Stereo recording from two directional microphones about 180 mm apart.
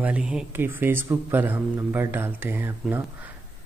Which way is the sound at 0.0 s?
5° right (ahead or behind).